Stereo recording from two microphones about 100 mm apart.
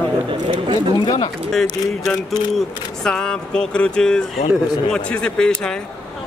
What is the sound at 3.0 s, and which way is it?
A man's voice, 10° left (ahead or behind).